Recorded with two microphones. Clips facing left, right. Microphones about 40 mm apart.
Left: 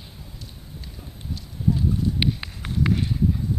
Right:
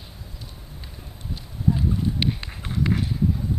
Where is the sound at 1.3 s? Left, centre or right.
Right.